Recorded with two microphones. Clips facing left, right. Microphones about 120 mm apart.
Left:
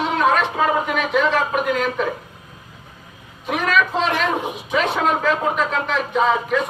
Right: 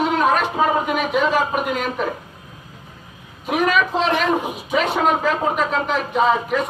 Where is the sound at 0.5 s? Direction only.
15° right (ahead or behind).